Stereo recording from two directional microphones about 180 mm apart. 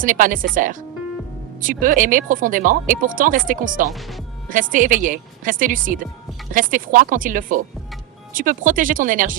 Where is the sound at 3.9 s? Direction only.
Centre (ahead or behind).